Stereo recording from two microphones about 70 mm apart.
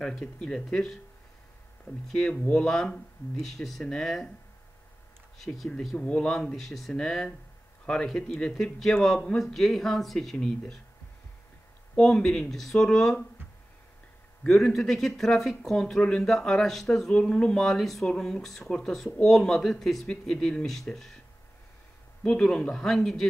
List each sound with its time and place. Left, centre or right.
0.0 s speech: centre
2.4 s speech: centre
5.4 s speech: centre
5.9 s speech: centre
6.2 s speech: centre
11.9 s speech: centre
14.5 s speech: centre
22.2 s speech: centre